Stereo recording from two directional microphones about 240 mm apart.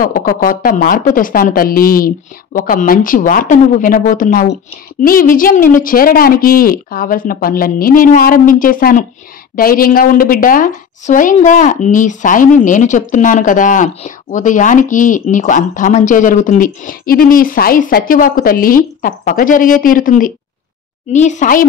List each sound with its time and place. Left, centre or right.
0.0 s speech: left